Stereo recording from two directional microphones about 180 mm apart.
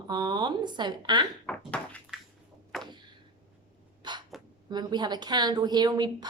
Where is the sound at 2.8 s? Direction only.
25° right (ahead or behind).